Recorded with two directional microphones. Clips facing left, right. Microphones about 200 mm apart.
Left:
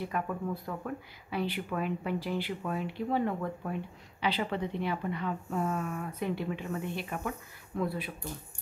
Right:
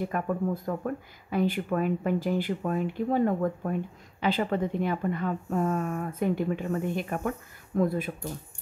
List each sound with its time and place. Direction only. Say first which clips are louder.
0.1 s speech: right 4 dB; 45° right (ahead or behind)